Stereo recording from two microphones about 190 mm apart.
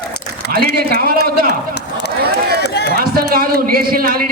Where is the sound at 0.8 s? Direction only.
50° right (ahead or behind).